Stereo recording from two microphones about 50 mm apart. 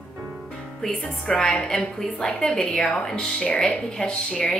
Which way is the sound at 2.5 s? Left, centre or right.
Centre.